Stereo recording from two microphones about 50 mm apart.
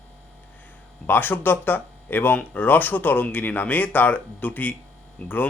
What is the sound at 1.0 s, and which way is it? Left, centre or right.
Speech, left.